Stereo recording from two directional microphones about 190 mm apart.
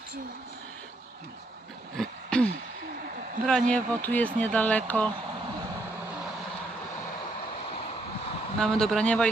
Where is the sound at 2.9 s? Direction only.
50° right (ahead or behind).